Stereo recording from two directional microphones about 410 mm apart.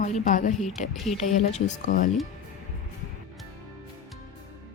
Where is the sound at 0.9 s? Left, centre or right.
Centre.